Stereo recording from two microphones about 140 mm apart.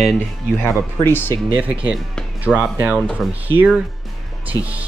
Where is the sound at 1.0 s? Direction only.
15° left (ahead or behind).